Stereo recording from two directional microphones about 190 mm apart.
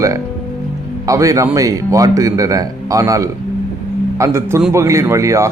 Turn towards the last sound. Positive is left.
turn(degrees=-15)  # may be behind; listen again after turning